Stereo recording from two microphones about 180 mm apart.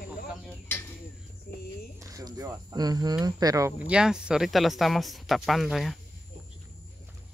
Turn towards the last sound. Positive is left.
turn(degrees=0)  # may be behind; listen again after turning